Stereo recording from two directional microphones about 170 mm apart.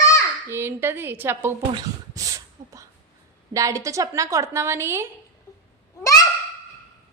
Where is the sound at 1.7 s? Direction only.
20° right (ahead or behind).